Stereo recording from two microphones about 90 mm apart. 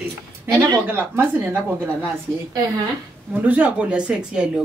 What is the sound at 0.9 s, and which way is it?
A woman's voice, 25° right (ahead or behind).